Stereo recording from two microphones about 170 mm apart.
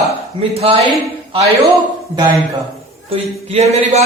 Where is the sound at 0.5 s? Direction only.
35° right (ahead or behind).